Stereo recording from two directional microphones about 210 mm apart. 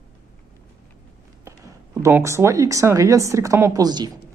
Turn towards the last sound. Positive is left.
turn(degrees=-20)  # may be behind; listen again after turning